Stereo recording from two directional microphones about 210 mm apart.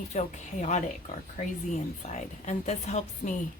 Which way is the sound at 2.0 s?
35° left (ahead or behind).